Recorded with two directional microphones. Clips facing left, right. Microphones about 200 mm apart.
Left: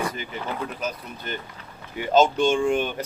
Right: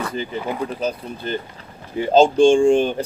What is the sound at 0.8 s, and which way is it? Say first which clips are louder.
Speech: right 7 dB; 30° right (ahead or behind).